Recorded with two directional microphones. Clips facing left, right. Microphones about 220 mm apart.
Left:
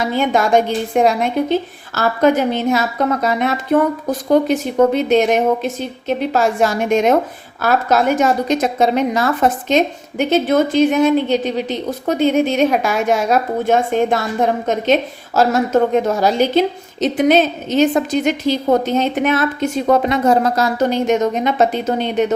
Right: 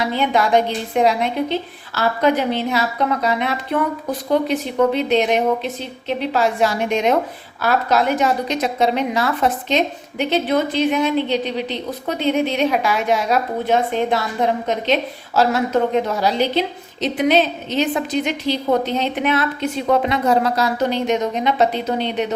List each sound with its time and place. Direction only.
0.0 s a woman's voice: 45° left (ahead or behind)